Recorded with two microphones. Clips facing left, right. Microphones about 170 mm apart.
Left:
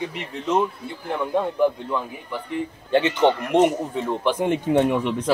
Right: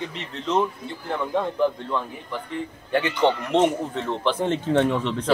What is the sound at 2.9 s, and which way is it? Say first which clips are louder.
Speech: left 3 dB; 25° left (ahead or behind).